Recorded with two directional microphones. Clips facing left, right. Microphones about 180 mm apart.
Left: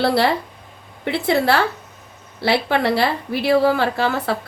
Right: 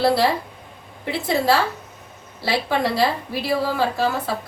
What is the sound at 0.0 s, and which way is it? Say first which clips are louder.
A woman's voice: left 1 dB; 65° left (ahead or behind).